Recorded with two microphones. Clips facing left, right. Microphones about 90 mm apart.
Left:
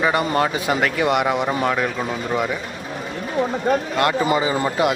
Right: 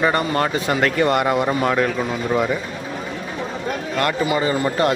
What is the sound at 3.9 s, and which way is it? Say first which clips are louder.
Speech: left 1 dB; 15° left (ahead or behind).